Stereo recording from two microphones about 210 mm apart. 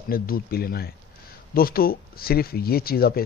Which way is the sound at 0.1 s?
45° left (ahead or behind).